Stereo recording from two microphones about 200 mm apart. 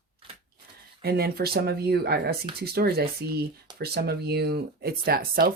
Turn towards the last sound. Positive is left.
turn(degrees=-50)  # may be behind; listen again after turning